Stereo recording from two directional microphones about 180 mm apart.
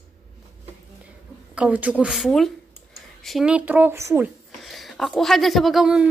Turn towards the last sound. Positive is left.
turn(degrees=-5)  # may be behind; listen again after turning